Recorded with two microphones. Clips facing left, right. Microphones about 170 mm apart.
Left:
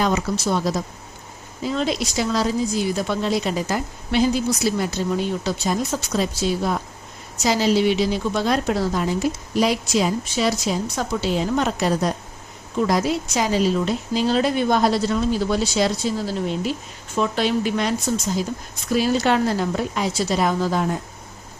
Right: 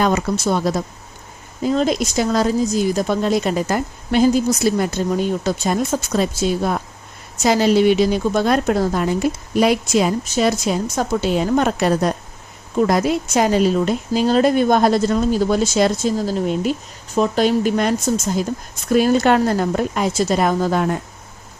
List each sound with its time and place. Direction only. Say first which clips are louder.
0.0 s speech: right 3 dB; 50° right (ahead or behind)